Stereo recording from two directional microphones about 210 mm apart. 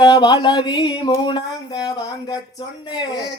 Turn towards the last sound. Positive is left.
turn(degrees=20)  # may be behind; listen again after turning